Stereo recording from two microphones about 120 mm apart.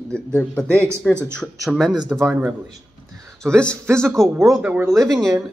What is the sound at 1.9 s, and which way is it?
Speech, 35° right (ahead or behind).